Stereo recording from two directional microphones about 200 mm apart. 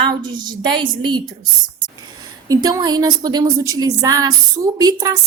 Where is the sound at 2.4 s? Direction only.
20° right (ahead or behind).